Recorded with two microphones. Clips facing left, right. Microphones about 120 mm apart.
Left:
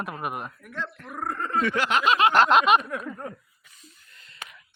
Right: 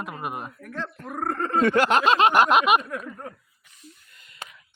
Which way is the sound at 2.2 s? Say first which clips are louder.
Left 3 dB; 10° right (ahead or behind).